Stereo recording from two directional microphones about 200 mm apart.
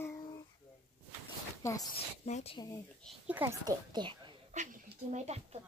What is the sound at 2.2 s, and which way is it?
Speech, 30° left (ahead or behind).